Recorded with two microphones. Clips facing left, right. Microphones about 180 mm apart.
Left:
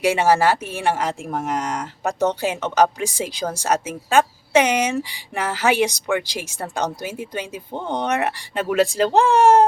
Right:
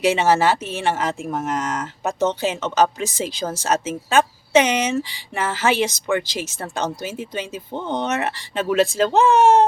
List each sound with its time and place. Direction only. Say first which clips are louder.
0.0 s speech: even; 10° left (ahead or behind)